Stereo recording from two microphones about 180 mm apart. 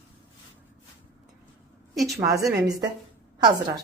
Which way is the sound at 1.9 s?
Centre (ahead or behind).